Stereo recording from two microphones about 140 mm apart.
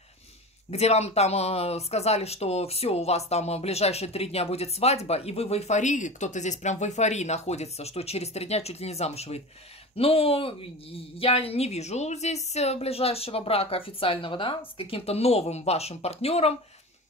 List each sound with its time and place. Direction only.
0.7 s speech: 50° left (ahead or behind)